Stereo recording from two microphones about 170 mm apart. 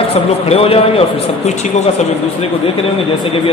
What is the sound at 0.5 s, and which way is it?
A man's voice, 35° left (ahead or behind).